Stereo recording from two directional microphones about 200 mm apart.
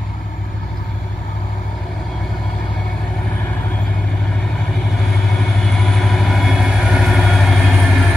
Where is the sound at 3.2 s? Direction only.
5° left (ahead or behind).